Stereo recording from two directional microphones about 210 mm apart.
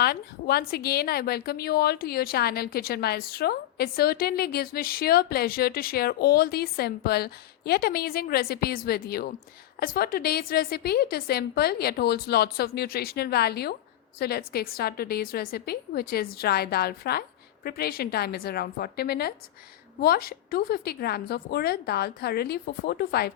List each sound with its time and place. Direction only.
0.0 s a woman's voice: 50° left (ahead or behind)